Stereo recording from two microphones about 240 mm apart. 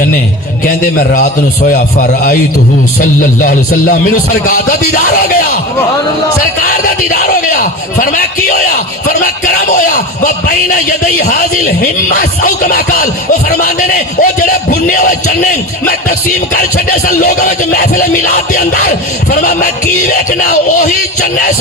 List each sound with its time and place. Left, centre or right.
1.1 s music: left
6.7 s music: left
9.7 s music: left
16.6 s music: left